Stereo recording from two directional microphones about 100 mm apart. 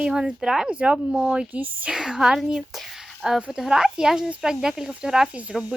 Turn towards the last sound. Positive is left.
turn(degrees=-10)  # may be behind; listen again after turning